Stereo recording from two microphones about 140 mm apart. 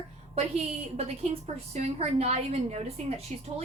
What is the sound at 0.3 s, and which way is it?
Speech, 45° right (ahead or behind).